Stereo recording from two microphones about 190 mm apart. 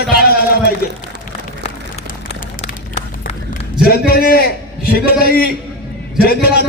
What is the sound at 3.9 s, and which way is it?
A man's voice, 55° left (ahead or behind).